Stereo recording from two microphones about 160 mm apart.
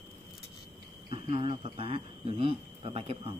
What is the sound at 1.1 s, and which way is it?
Speech, 35° right (ahead or behind).